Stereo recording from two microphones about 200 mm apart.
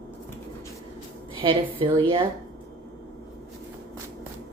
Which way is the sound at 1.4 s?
25° right (ahead or behind).